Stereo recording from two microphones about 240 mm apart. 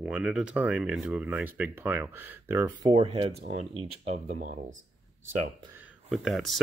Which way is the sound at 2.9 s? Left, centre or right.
Right.